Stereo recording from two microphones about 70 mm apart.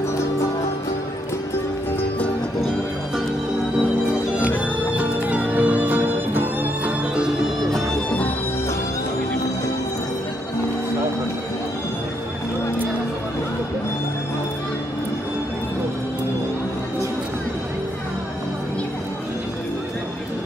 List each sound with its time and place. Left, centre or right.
4.7 s music: right